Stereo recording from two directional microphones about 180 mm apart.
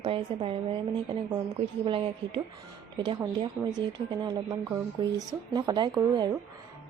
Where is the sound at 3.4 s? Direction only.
20° right (ahead or behind).